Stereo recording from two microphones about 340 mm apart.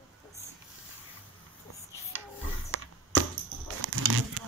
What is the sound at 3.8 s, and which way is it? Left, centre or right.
Roaring cats, right.